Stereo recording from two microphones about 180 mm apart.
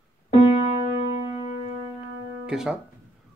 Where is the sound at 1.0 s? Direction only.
35° left (ahead or behind).